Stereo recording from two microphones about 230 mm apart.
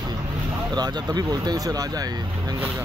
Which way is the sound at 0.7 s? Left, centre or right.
Centre.